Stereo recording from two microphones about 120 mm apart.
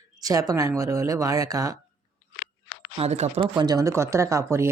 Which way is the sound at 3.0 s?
60° right (ahead or behind).